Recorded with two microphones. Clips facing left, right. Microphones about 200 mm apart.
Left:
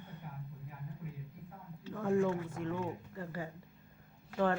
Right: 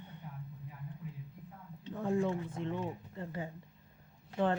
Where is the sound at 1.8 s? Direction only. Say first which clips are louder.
Left 1 dB; 20° right (ahead or behind).